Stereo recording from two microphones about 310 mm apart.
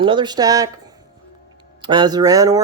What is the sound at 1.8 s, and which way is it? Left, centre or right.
Speech, centre.